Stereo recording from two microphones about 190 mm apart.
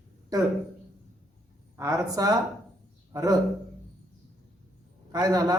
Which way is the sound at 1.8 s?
15° right (ahead or behind).